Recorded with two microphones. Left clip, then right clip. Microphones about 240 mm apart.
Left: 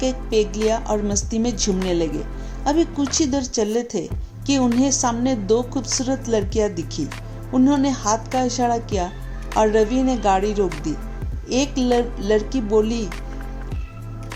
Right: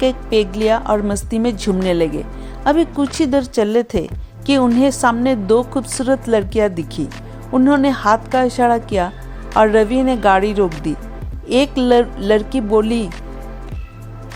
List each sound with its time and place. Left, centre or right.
0.0 s a woman's voice: right